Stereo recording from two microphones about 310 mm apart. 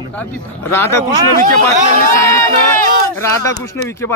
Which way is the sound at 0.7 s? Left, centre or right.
Centre.